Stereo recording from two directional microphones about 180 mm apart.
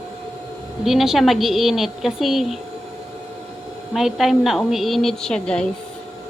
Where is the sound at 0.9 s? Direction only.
Centre (ahead or behind).